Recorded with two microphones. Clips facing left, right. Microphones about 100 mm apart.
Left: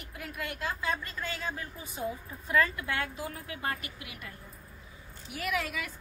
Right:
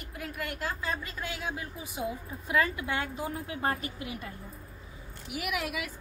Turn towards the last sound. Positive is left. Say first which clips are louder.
# even
turn(degrees=-10)  # may be behind; listen again after turning